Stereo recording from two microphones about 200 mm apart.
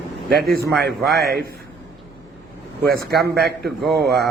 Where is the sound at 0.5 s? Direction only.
50° right (ahead or behind).